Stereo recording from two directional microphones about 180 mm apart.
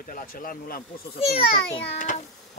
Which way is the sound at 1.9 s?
45° left (ahead or behind).